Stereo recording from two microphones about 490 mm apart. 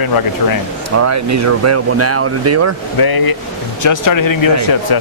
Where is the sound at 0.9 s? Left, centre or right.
Right.